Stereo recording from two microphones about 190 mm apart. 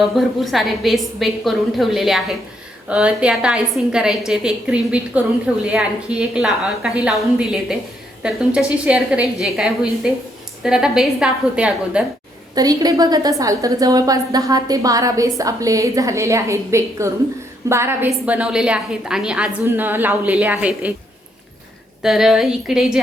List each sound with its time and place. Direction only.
0.0 s a woman's voice: centre (ahead or behind)
12.5 s a woman's voice: 20° right (ahead or behind)
22.0 s a woman's voice: centre (ahead or behind)